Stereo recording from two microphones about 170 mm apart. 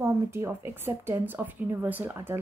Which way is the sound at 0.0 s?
15° right (ahead or behind).